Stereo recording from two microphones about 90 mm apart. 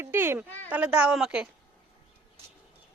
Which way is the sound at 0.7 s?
15° right (ahead or behind).